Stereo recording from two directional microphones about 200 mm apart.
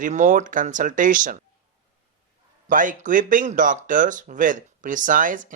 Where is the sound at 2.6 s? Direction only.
40° right (ahead or behind).